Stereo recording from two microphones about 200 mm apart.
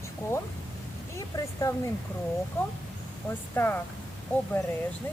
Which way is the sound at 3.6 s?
10° left (ahead or behind).